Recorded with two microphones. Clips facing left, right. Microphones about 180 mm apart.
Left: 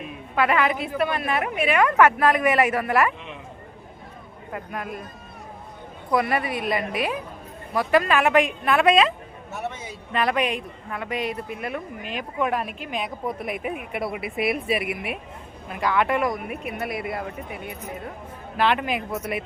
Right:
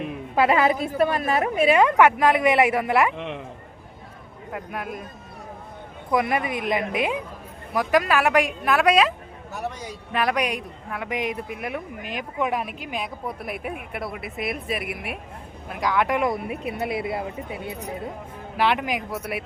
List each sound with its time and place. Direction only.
0.3 s a woman's voice: 30° right (ahead or behind)
2.0 s speech: 15° right (ahead or behind)
3.2 s a man's voice: 70° right (ahead or behind)
4.5 s speech: 10° right (ahead or behind)
6.1 s a woman's voice: 15° right (ahead or behind)
16.2 s speech: 25° right (ahead or behind)
18.5 s speech: 10° right (ahead or behind)